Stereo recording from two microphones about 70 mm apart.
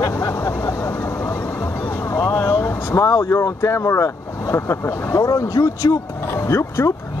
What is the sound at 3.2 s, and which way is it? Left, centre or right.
Speech, left.